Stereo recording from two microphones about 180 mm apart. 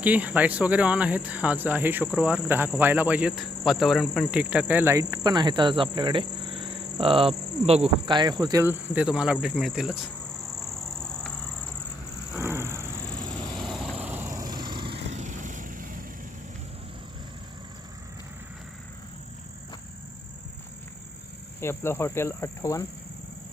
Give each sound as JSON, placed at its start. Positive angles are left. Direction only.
{"t": 0.0, "sound": "cricket", "side_deg": -10}
{"t": 4.3, "sound": "speech", "side_deg": -5}
{"t": 11.0, "sound": "vehicle", "side_deg": 5}
{"t": 12.4, "sound": "vehicle", "side_deg": -15}
{"t": 13.6, "sound": "vehicle", "side_deg": 0}
{"t": 15.1, "sound": "vehicle", "side_deg": -40}
{"t": 21.6, "sound": "speech", "side_deg": 15}